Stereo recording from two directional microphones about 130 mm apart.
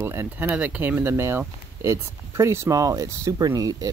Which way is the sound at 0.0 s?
20° right (ahead or behind).